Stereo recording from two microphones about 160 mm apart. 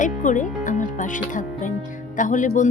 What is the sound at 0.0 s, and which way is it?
Speech, 55° left (ahead or behind).